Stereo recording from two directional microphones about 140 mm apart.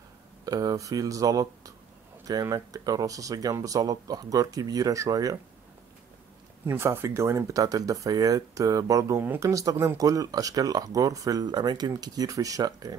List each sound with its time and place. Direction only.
0.5 s speech: 25° right (ahead or behind)
6.6 s speech: 20° right (ahead or behind)